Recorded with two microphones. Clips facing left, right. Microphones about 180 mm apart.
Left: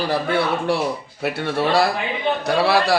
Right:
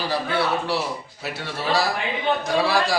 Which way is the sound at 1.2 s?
60° left (ahead or behind).